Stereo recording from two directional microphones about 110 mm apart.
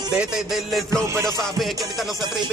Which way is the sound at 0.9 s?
30° right (ahead or behind).